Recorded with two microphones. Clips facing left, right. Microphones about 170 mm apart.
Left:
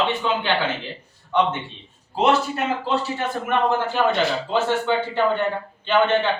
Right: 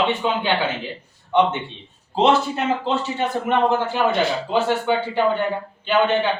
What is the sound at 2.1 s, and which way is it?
A man's voice, 25° right (ahead or behind).